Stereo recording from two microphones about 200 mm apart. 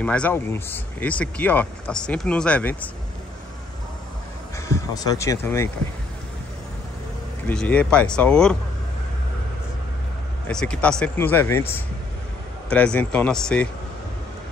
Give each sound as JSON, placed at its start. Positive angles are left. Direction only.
{"t": 0.0, "sound": "speech", "side_deg": 5}
{"t": 4.6, "sound": "speech", "side_deg": 15}
{"t": 7.4, "sound": "speech", "side_deg": 5}
{"t": 10.5, "sound": "speech", "side_deg": 5}